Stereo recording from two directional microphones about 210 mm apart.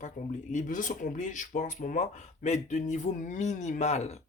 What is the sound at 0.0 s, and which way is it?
Speech, 35° left (ahead or behind).